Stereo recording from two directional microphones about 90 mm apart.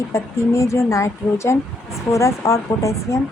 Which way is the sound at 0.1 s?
35° left (ahead or behind).